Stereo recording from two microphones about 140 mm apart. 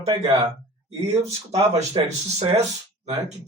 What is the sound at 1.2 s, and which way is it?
Speech, 50° right (ahead or behind).